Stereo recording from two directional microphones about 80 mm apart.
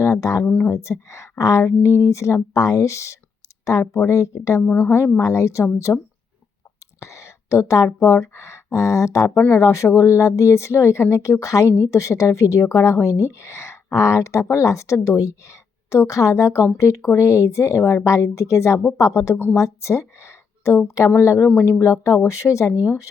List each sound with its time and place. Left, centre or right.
0.0 s speech: left
0.4 s a woman's voice: left
0.7 s a woman's voice: left
4.6 s a woman's voice: left
5.2 s a woman's voice: left
5.9 s a woman's voice: left
7.0 s a woman's voice: left